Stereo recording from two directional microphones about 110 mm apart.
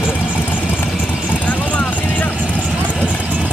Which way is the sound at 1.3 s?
15° left (ahead or behind).